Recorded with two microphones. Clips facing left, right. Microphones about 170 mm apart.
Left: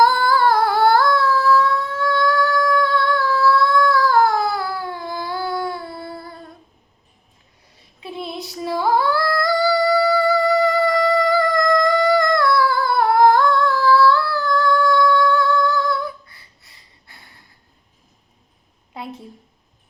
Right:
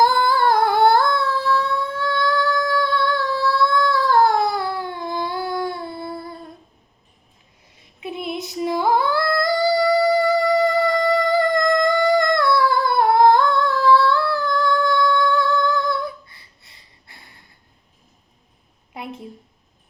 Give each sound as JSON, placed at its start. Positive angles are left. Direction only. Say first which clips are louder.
{"t": 0.0, "sound": "humming", "louder": "left 1 dB", "side_deg": -25}
{"t": 3.3, "sound": "a sound", "louder": "left 4 dB", "side_deg": -30}
{"t": 8.0, "sound": "female singing", "louder": "right 2 dB", "side_deg": -20}